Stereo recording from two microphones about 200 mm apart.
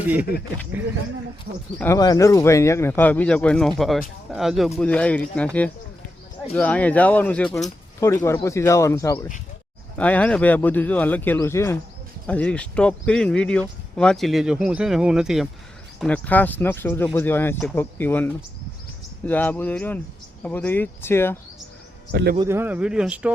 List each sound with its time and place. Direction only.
0.0 s speech: 10° right (ahead or behind)
1.5 s speech: 55° right (ahead or behind)
1.8 s speech: 15° left (ahead or behind)
6.5 s speech: 10° left (ahead or behind)
22.1 s a man's voice: 55° right (ahead or behind)
22.4 s speech: 10° right (ahead or behind)